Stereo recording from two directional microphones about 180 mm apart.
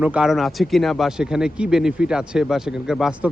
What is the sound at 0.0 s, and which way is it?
Speech, 5° right (ahead or behind).